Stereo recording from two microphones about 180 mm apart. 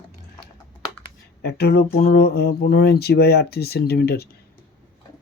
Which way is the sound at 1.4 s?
60° left (ahead or behind).